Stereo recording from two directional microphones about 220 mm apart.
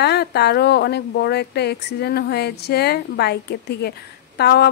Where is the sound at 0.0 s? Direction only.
50° left (ahead or behind).